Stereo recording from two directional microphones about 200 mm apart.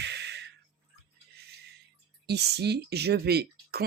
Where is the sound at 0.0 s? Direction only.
55° right (ahead or behind).